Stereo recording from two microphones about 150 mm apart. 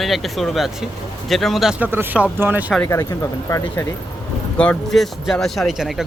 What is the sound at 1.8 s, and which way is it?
Speech, 15° right (ahead or behind).